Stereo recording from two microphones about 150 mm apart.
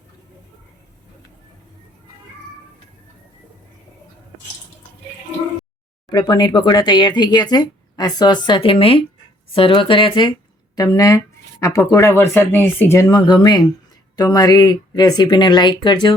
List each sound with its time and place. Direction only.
6.1 s speech: 25° left (ahead or behind)
10.8 s speech: 20° left (ahead or behind)